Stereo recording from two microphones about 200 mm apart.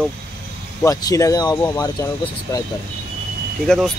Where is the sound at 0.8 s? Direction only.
15° left (ahead or behind).